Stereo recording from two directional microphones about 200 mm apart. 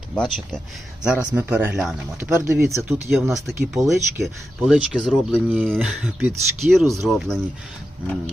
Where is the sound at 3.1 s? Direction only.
Centre (ahead or behind).